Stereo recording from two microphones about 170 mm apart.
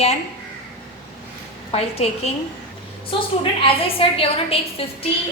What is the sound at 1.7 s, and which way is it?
Speech, 35° left (ahead or behind).